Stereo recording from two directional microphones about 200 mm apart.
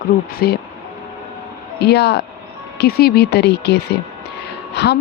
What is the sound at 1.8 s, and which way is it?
Speech, 55° left (ahead or behind).